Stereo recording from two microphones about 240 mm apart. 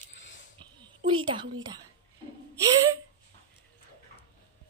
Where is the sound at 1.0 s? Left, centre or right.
Right.